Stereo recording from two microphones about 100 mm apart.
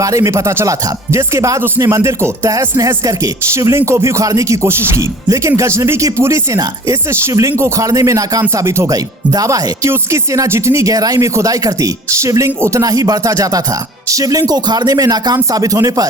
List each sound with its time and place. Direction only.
0.0 s speech: 30° right (ahead or behind)